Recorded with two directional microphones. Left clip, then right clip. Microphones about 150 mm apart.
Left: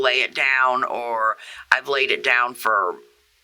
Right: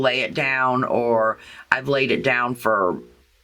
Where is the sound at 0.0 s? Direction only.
40° left (ahead or behind).